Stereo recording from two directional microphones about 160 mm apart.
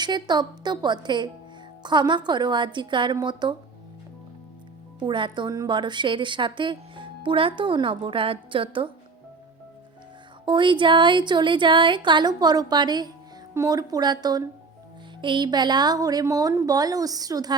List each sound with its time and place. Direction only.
0.0 s speech: 25° right (ahead or behind)
4.9 s a woman's voice: 30° right (ahead or behind)
10.4 s speech: 30° right (ahead or behind)